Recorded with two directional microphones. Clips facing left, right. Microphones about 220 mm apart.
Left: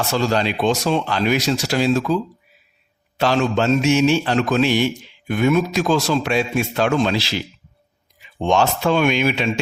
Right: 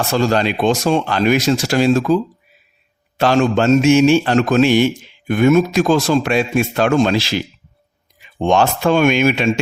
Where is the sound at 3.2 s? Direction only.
50° right (ahead or behind).